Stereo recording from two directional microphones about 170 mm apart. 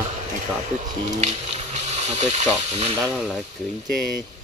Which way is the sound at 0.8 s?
45° right (ahead or behind).